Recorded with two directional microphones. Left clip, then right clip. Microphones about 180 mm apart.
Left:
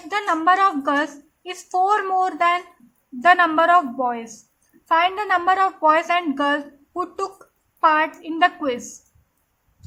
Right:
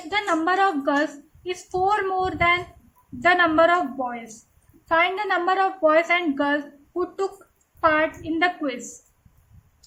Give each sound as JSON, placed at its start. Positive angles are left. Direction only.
{"t": 0.1, "sound": "a woman's voice", "side_deg": 30}
{"t": 7.8, "sound": "a woman's voice", "side_deg": 30}